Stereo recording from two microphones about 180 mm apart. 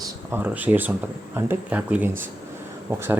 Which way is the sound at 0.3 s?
10° right (ahead or behind).